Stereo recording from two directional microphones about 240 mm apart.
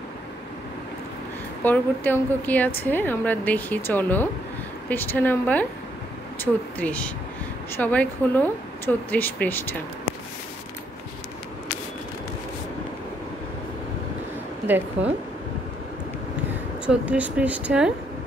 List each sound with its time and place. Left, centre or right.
1.6 s a woman's voice: centre
16.8 s speech: centre